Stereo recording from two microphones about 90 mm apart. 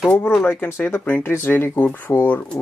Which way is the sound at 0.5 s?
25° left (ahead or behind).